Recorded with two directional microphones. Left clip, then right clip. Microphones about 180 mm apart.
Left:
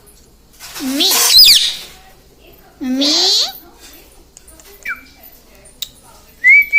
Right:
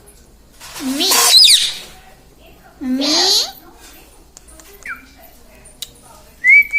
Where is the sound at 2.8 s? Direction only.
20° left (ahead or behind).